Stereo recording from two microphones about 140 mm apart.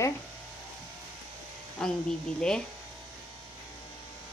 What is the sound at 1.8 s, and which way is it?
Speech, 5° left (ahead or behind).